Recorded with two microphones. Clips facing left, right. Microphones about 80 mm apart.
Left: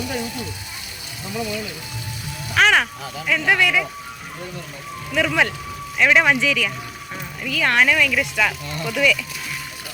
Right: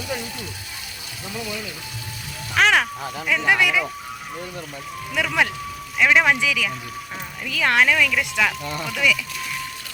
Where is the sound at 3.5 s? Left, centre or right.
Centre.